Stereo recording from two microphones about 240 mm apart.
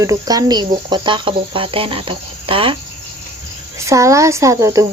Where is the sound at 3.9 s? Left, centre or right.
Centre.